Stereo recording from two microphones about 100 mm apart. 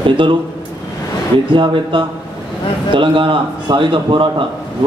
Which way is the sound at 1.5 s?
55° right (ahead or behind).